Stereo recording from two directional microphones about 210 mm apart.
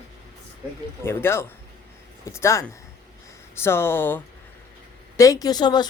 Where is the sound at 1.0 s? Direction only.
10° left (ahead or behind).